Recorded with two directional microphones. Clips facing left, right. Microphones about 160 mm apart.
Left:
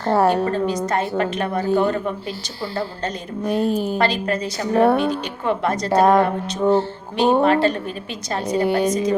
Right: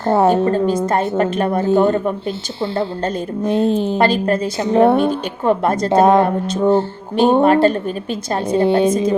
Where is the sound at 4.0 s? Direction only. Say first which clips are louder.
Right 5 dB; 50° right (ahead or behind).